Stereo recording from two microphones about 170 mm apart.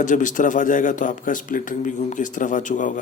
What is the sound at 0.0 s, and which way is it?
A man's voice, 50° left (ahead or behind).